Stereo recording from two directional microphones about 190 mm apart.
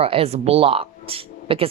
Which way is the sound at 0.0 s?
30° right (ahead or behind).